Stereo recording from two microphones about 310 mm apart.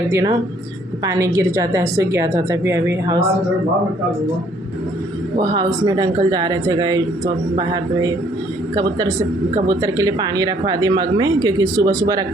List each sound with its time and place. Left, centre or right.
0.1 s speech: centre
5.4 s speech: centre